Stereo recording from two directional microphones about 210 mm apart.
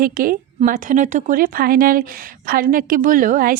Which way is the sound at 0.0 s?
40° right (ahead or behind).